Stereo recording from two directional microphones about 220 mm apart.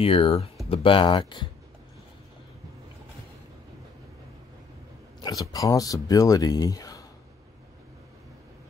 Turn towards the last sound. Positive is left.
turn(degrees=15)  # may be behind; listen again after turning